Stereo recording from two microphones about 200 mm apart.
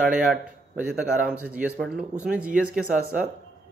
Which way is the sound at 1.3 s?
5° right (ahead or behind).